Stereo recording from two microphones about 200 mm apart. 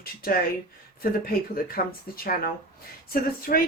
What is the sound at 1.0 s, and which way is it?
Speech, 45° left (ahead or behind).